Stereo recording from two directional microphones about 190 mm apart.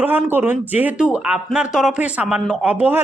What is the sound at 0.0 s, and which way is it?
A man's voice, 10° right (ahead or behind).